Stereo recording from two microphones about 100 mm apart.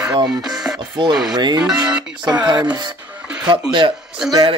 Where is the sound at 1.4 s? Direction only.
45° right (ahead or behind).